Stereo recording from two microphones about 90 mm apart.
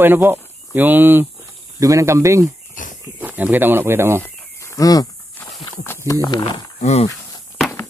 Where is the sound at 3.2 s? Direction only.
20° right (ahead or behind).